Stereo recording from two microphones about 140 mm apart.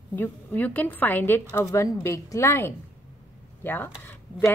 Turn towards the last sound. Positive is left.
turn(degrees=20)  # may be behind; listen again after turning